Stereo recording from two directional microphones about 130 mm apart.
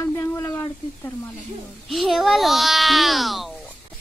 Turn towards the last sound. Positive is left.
turn(degrees=0)  # may be behind; listen again after turning